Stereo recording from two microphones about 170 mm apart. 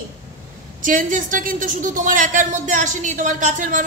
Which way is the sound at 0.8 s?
50° right (ahead or behind).